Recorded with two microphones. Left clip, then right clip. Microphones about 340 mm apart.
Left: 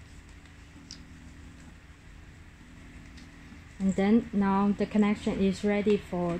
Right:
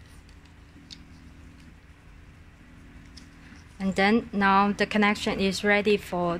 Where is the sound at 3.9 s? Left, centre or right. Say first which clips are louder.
Right 4 dB; right.